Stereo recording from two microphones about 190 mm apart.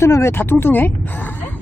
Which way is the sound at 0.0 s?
15° left (ahead or behind).